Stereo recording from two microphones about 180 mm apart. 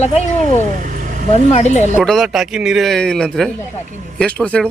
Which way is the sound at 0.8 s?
45° right (ahead or behind).